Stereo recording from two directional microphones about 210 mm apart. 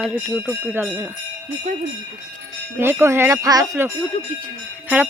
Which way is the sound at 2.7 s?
10° right (ahead or behind).